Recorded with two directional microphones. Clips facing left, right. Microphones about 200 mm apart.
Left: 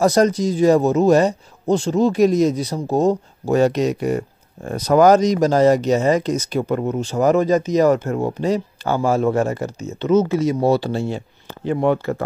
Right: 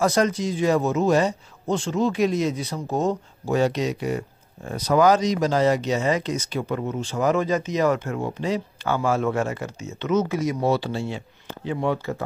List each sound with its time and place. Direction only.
0.0 s speech: 40° left (ahead or behind); by 12.3 s 55° left (ahead or behind)